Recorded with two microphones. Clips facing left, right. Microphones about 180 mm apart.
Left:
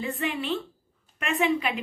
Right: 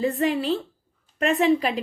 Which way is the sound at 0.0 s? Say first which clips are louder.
Right 7 dB; 35° right (ahead or behind).